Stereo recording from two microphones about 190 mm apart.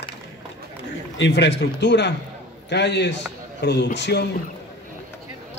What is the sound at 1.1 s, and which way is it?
A man's voice, 65° left (ahead or behind).